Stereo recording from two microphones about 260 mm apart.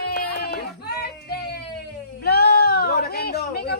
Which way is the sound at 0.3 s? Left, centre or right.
Left.